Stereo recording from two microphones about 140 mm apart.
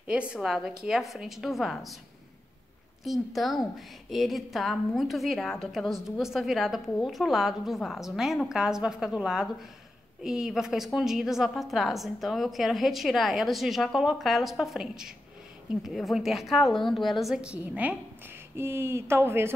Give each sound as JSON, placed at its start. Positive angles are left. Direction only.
{"t": 0.0, "sound": "a woman's voice", "side_deg": -10}
{"t": 3.0, "sound": "a woman's voice", "side_deg": 0}